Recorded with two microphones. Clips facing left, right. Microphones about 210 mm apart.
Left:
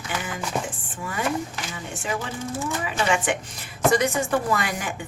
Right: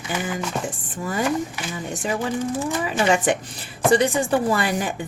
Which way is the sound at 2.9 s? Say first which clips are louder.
Right 4 dB; 35° right (ahead or behind).